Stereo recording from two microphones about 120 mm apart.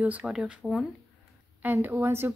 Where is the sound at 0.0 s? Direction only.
15° right (ahead or behind).